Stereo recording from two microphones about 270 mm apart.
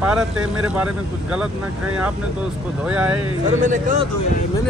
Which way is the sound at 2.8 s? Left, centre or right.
Centre.